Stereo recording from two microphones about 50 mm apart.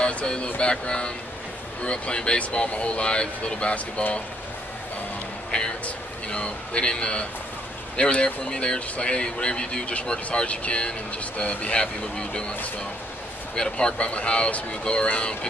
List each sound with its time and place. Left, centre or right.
0.0 s speech: centre
6.3 s speech: left
13.6 s speech: centre